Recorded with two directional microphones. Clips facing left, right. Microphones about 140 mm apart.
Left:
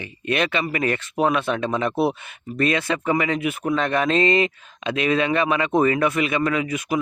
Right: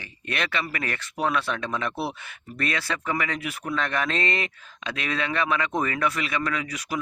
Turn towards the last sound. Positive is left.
turn(degrees=20)  # may be behind; listen again after turning